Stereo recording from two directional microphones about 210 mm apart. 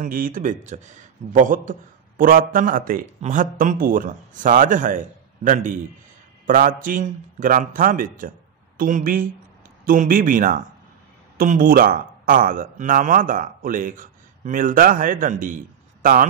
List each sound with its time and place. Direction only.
0.0 s a man's voice: 40° right (ahead or behind)